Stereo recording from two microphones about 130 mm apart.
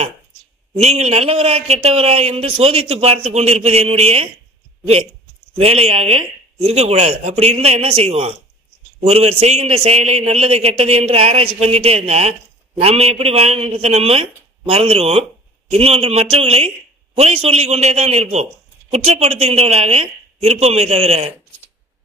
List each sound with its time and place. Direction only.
0.7 s a man's voice: 60° right (ahead or behind)
5.6 s a man's voice: 50° right (ahead or behind)